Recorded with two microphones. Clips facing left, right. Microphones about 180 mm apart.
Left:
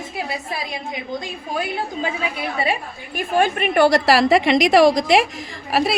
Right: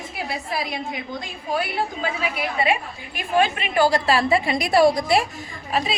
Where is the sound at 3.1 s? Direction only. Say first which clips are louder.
Left 2 dB; 50° left (ahead or behind); by 5.9 s 75° left (ahead or behind).